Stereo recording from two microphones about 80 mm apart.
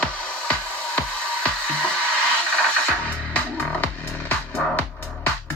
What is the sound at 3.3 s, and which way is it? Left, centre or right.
Music, centre.